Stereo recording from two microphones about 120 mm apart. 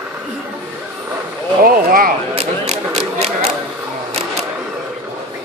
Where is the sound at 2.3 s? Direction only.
65° right (ahead or behind).